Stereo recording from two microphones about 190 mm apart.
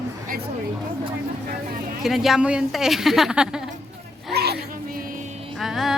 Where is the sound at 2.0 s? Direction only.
Centre (ahead or behind).